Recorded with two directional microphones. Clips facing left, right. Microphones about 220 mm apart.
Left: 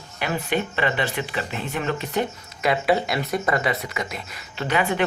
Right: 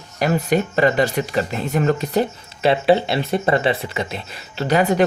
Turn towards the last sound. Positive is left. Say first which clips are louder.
# right 6 dB
turn(degrees=-40)  # may be behind; listen again after turning